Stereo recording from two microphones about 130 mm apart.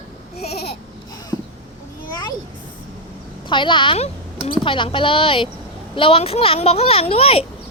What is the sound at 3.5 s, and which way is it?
A woman's voice, 40° left (ahead or behind).